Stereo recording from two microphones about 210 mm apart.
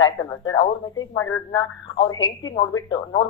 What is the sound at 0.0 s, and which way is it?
Speech, 20° left (ahead or behind).